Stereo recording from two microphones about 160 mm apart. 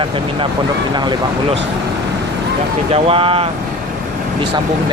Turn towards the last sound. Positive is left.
turn(degrees=-35)  # may be behind; listen again after turning